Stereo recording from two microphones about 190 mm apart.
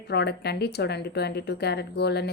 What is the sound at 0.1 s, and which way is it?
A woman's voice, 60° left (ahead or behind).